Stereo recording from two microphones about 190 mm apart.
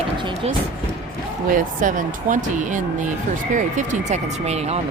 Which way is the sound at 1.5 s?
45° right (ahead or behind).